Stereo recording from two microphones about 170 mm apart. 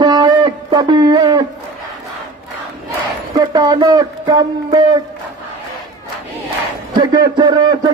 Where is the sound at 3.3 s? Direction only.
25° right (ahead or behind).